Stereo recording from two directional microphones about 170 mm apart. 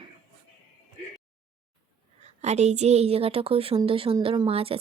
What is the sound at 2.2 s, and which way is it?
Speech, 40° right (ahead or behind).